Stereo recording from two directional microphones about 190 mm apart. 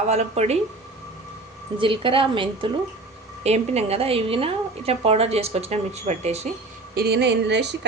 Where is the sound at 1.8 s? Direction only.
25° right (ahead or behind).